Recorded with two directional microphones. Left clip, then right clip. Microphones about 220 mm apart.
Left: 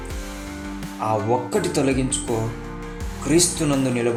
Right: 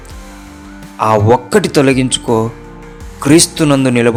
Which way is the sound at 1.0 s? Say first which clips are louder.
Right 12 dB; 35° right (ahead or behind).